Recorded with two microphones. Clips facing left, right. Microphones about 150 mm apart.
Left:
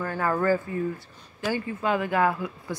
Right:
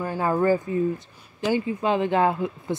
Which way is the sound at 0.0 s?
15° right (ahead or behind).